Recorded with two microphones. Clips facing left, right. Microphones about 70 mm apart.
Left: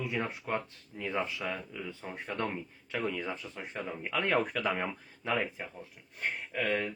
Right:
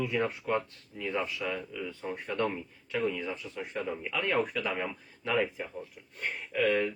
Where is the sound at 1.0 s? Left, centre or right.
Left.